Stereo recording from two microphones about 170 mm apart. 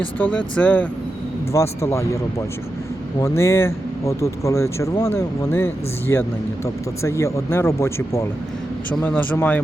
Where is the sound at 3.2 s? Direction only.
15° left (ahead or behind).